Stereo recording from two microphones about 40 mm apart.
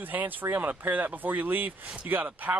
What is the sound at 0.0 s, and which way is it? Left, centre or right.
Speech, right.